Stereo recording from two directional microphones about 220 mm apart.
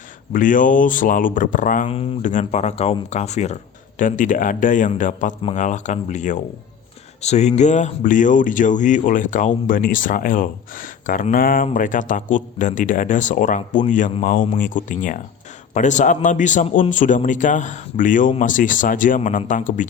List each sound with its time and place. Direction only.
0.3 s speech: 35° left (ahead or behind)